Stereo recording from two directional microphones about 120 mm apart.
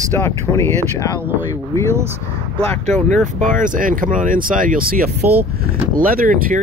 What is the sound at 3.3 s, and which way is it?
Speech, 90° right.